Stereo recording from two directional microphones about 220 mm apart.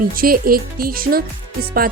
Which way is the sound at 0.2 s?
40° right (ahead or behind).